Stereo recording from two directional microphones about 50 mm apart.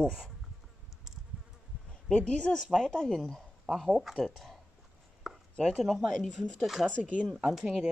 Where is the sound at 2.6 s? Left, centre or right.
Centre.